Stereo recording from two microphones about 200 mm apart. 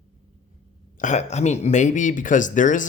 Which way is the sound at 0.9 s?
40° left (ahead or behind).